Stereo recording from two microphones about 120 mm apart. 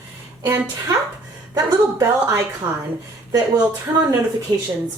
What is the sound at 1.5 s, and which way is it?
A woman's voice, 30° right (ahead or behind).